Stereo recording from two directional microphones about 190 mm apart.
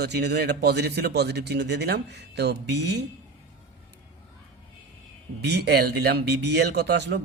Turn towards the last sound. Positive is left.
turn(degrees=-60)  # may be behind; listen again after turning